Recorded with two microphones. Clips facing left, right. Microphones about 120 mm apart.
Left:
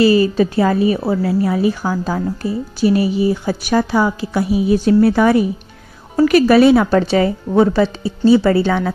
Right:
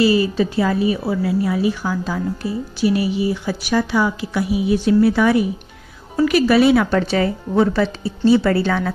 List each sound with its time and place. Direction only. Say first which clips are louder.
0.0 s a woman's voice: left 4 dB; 45° left (ahead or behind); by 8.9 s 20° left (ahead or behind)